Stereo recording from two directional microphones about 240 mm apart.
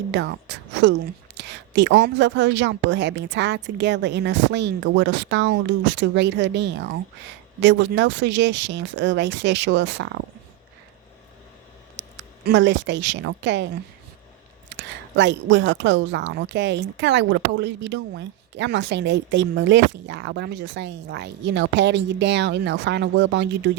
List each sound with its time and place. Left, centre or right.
0.1 s speech: right
11.9 s speech: right
14.7 s speech: right